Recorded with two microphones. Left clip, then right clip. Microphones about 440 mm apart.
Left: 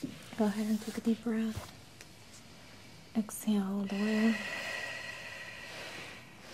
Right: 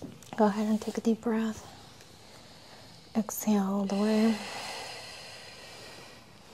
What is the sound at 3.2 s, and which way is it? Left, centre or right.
Speech, right.